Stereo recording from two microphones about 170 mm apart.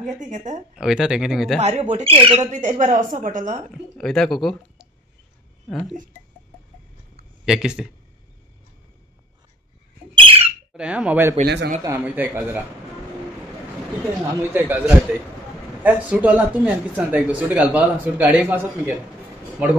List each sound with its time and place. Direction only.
0.0 s speech: 45° right (ahead or behind)
0.7 s speech: 5° right (ahead or behind)
1.6 s speech: 40° right (ahead or behind)
2.5 s speech: 45° right (ahead or behind)
4.0 s speech: centre (ahead or behind)
7.4 s speech: 5° right (ahead or behind)
10.1 s bird: 35° right (ahead or behind)
10.7 s speech: 5° right (ahead or behind)
11.4 s a man's voice: 80° right
11.8 s speech: 10° right (ahead or behind)
14.2 s speech: 10° right (ahead or behind)